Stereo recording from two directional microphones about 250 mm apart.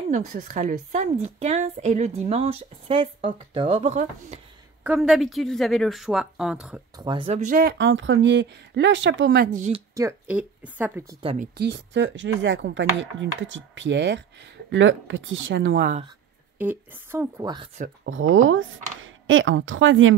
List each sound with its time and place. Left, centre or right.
0.1 s a woman's voice: right
4.8 s speech: centre
7.0 s speech: centre
9.9 s speech: centre
11.5 s speech: right
16.5 s speech: centre
18.3 s speech: right